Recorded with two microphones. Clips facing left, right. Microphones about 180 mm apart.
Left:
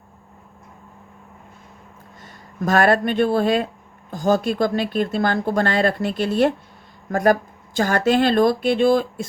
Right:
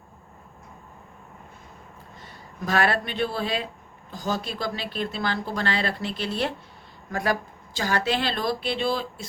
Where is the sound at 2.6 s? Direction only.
45° left (ahead or behind).